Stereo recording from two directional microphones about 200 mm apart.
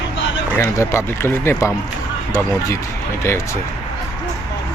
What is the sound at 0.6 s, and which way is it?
Speech, 10° left (ahead or behind).